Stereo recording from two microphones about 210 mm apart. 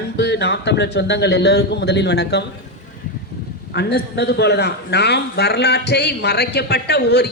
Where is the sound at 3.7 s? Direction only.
50° left (ahead or behind).